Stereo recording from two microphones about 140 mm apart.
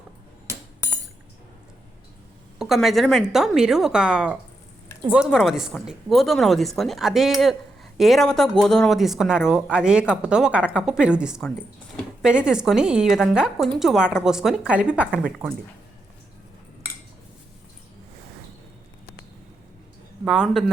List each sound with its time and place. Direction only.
2.6 s a woman's voice: centre (ahead or behind)
11.3 s speech: 15° left (ahead or behind)
12.2 s a woman's voice: 5° right (ahead or behind)
20.2 s speech: centre (ahead or behind)